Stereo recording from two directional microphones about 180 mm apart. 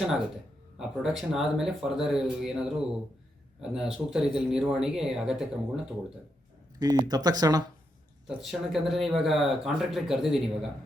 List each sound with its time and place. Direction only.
0.8 s speech: 5° right (ahead or behind)
6.7 s speech: 20° right (ahead or behind)
8.4 s speech: centre (ahead or behind)